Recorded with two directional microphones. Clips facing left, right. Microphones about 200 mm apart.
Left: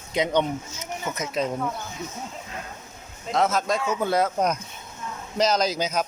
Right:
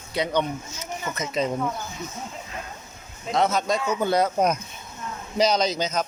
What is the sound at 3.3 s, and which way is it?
Speech, centre (ahead or behind).